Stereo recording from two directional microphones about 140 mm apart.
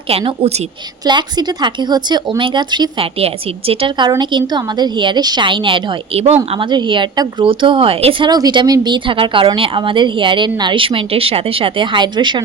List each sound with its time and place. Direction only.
0.1 s a woman's voice: 45° right (ahead or behind)
1.0 s a woman's voice: 30° right (ahead or behind)
3.2 s a woman's voice: 45° right (ahead or behind)
8.3 s a woman's voice: 30° right (ahead or behind)